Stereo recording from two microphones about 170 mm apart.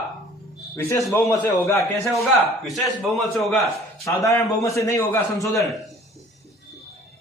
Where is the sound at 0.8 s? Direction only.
15° left (ahead or behind).